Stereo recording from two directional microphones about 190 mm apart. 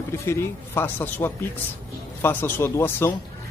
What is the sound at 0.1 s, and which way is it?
Speech, 15° left (ahead or behind).